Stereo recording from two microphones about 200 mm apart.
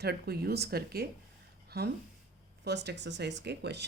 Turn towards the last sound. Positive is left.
turn(degrees=-55)  # may be behind; listen again after turning